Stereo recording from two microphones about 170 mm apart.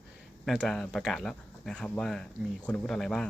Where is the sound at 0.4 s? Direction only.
5° left (ahead or behind).